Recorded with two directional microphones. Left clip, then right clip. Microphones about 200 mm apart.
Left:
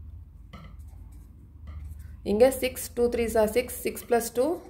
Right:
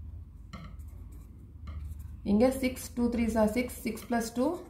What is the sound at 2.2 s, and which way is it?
A woman's voice, 55° left (ahead or behind).